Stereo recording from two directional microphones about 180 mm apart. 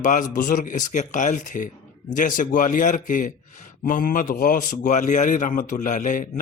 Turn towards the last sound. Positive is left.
turn(degrees=45)  # may be behind; listen again after turning